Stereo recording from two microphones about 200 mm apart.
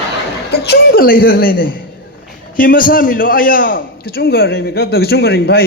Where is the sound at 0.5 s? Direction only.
55° left (ahead or behind).